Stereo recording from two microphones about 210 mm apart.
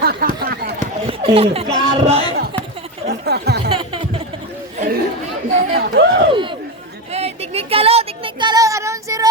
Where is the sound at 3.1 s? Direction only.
50° right (ahead or behind).